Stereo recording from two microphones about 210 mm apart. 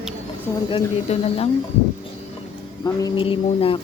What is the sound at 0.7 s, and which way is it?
Speech, 30° left (ahead or behind).